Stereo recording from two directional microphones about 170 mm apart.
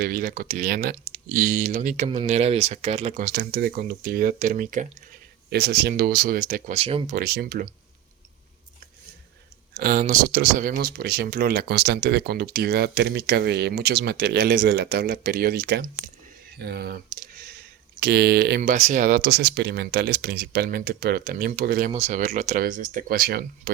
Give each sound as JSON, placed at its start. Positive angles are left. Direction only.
{"t": 0.0, "sound": "speech", "side_deg": -60}
{"t": 3.2, "sound": "speech", "side_deg": -60}
{"t": 5.5, "sound": "speech", "side_deg": -70}
{"t": 6.7, "sound": "speech", "side_deg": -35}
{"t": 7.2, "sound": "speech", "side_deg": -65}
{"t": 9.7, "sound": "speech", "side_deg": -55}
{"t": 18.7, "sound": "speech", "side_deg": -50}
{"t": 21.9, "sound": "speech", "side_deg": -45}